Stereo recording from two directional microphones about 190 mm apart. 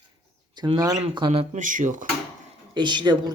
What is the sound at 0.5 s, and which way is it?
Speech, 25° right (ahead or behind).